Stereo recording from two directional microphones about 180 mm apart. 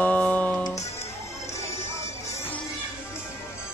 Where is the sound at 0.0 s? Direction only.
5° left (ahead or behind).